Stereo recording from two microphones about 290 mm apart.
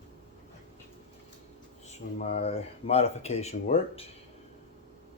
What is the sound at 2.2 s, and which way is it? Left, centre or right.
Speech, left.